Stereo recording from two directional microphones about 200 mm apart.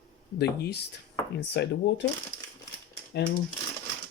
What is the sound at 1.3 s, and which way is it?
Speech, 60° left (ahead or behind).